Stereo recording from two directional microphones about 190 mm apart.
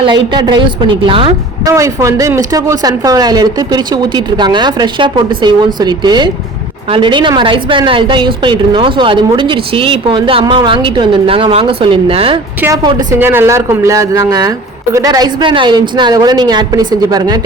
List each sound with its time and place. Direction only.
0.0 s a woman's voice: 25° right (ahead or behind)
1.7 s a woman's voice: 15° right (ahead or behind)
12.6 s a woman's voice: 20° right (ahead or behind)